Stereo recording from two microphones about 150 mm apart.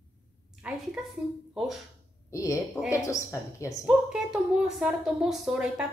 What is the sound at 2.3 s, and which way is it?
Speech, 20° left (ahead or behind).